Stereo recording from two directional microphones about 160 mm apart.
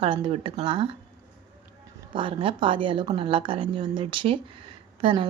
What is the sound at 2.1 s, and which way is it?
A woman's voice, 30° right (ahead or behind).